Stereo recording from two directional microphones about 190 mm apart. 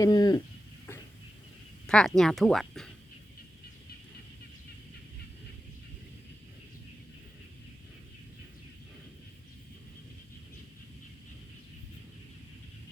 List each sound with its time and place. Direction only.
0.0 s speech: 20° left (ahead or behind)
1.9 s speech: 5° left (ahead or behind)